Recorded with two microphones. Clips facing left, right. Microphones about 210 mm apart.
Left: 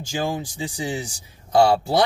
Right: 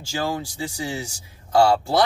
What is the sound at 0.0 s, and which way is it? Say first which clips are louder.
Speech: left 1 dB; 15° left (ahead or behind).